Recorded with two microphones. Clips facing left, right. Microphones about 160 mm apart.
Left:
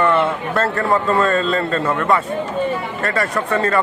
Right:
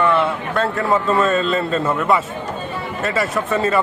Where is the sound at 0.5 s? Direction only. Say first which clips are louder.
Even; centre (ahead or behind).